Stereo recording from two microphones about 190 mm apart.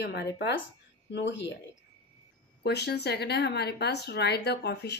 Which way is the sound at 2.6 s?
60° left (ahead or behind).